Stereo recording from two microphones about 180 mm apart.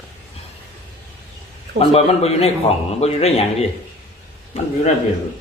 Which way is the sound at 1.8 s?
35° left (ahead or behind).